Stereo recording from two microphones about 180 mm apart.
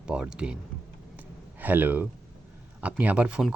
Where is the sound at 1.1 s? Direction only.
10° right (ahead or behind).